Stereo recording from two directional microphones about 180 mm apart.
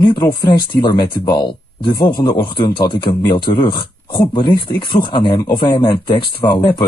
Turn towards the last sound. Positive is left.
turn(degrees=25)  # may be behind; listen again after turning